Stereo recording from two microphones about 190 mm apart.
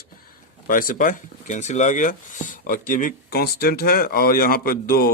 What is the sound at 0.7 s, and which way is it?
Speech, 45° left (ahead or behind).